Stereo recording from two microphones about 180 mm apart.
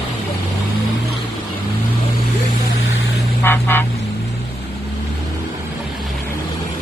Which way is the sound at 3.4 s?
10° left (ahead or behind).